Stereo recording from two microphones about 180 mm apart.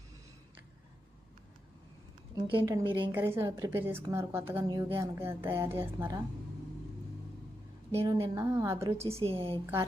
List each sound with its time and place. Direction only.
2.3 s a woman's voice: 20° right (ahead or behind)
3.1 s speech: 15° right (ahead or behind)
8.0 s speech: 15° right (ahead or behind)
9.0 s a woman's voice: 35° right (ahead or behind)